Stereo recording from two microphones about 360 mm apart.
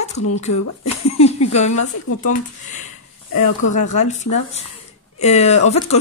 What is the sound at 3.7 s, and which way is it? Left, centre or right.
Speech, centre.